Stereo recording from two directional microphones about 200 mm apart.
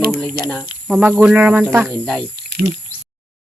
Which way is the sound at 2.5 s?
55° right (ahead or behind).